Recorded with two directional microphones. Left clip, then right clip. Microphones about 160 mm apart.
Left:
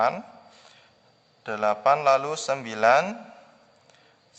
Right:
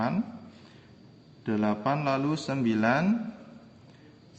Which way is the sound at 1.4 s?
50° left (ahead or behind).